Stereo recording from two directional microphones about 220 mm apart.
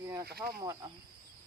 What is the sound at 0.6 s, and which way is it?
Speech, 15° right (ahead or behind).